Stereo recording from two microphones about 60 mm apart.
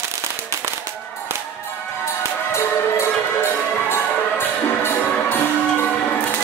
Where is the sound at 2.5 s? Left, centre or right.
Left.